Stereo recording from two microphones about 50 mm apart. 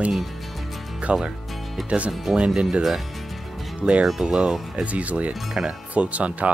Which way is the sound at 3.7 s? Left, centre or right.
Right.